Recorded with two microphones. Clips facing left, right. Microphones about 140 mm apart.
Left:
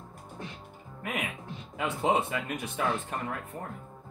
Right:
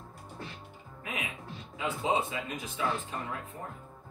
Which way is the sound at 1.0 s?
65° left (ahead or behind).